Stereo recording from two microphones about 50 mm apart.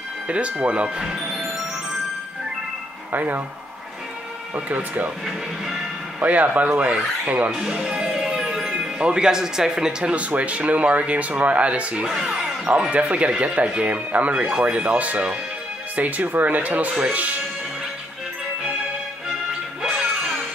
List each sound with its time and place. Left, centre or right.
0.3 s speech: right
3.1 s speech: right
4.6 s speech: right
6.1 s speech: right
7.7 s speech: centre
8.1 s music: centre
8.6 s speech: centre
12.1 s speech: centre
12.9 s speech: right